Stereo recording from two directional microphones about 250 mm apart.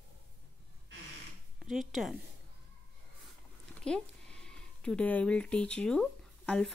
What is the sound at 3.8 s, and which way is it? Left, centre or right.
Speech, centre.